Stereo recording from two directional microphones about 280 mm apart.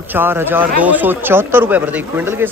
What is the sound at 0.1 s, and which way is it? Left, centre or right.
Speech, centre.